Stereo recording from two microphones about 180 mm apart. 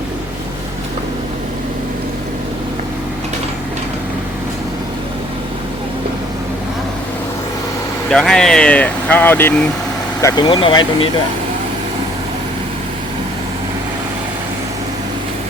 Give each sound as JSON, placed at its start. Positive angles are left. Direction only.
{"t": 8.1, "sound": "speech", "side_deg": 5}